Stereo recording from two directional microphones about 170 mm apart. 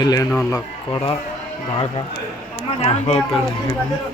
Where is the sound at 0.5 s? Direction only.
20° left (ahead or behind).